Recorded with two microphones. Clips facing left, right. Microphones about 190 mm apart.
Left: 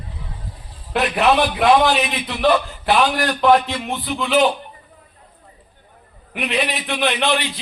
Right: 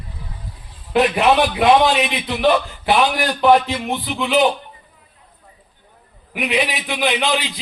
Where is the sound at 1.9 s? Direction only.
Centre (ahead or behind).